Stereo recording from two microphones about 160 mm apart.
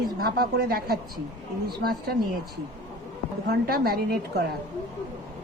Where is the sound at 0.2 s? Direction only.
70° right (ahead or behind).